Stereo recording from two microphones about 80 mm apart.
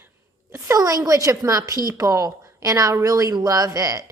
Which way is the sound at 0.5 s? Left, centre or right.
Right.